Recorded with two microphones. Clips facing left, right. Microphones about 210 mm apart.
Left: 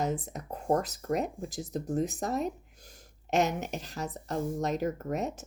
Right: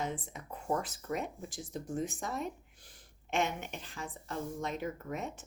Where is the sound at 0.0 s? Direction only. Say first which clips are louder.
Left 6 dB; 40° left (ahead or behind).